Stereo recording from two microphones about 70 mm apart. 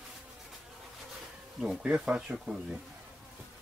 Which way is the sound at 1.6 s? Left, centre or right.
Centre.